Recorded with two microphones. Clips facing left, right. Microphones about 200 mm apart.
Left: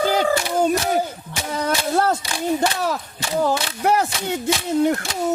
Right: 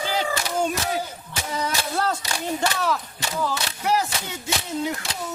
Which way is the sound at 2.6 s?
40° left (ahead or behind).